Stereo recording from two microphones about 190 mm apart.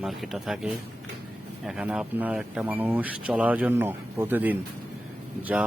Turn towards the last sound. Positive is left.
turn(degrees=-5)  # may be behind; listen again after turning